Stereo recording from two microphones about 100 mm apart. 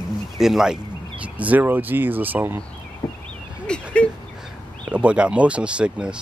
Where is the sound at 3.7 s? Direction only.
10° left (ahead or behind).